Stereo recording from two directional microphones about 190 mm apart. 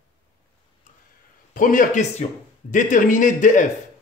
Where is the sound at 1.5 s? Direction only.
45° left (ahead or behind).